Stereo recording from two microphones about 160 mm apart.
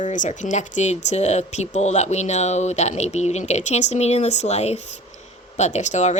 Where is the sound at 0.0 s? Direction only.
50° left (ahead or behind).